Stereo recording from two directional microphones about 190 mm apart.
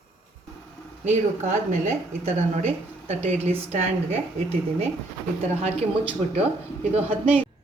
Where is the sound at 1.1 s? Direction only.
35° right (ahead or behind).